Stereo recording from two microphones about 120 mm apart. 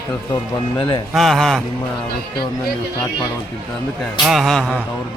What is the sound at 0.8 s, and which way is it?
Speech, 45° left (ahead or behind).